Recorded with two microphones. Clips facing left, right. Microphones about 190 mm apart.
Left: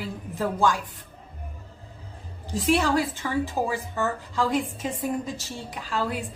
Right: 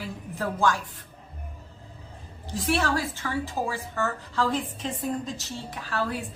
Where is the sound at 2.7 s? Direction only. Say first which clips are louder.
Left 4 dB; 15° left (ahead or behind).